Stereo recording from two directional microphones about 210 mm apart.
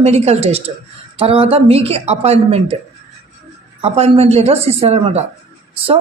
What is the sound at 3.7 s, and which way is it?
A woman's voice, 30° right (ahead or behind).